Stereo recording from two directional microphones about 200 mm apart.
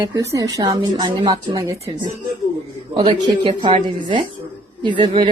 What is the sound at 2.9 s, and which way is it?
A woman's voice, 25° right (ahead or behind).